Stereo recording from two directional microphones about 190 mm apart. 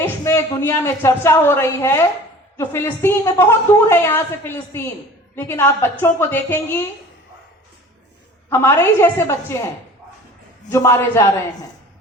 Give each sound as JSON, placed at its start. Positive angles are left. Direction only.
{"t": 0.0, "sound": "a man's voice", "side_deg": 15}
{"t": 8.4, "sound": "a woman's voice", "side_deg": 15}
{"t": 10.7, "sound": "a woman's voice", "side_deg": 15}